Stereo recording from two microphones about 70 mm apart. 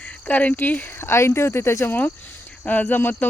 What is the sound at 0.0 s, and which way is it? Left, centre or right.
Speech, left.